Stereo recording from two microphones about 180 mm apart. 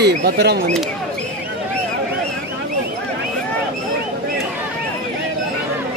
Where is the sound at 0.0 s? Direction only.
65° right (ahead or behind).